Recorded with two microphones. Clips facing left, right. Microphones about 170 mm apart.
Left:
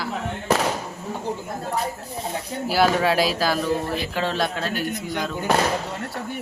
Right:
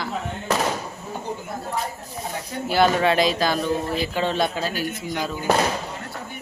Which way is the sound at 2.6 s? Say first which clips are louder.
Right 1 dB; 5° left (ahead or behind).